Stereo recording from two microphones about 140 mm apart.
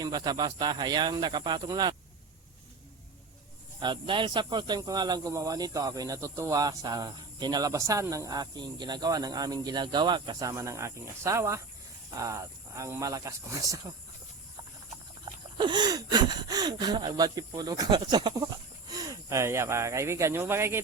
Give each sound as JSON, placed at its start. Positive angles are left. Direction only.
{"t": 0.0, "sound": "speech", "side_deg": -30}
{"t": 3.8, "sound": "speech", "side_deg": -35}
{"t": 10.5, "sound": "speech", "side_deg": -20}
{"t": 15.2, "sound": "speech", "side_deg": -35}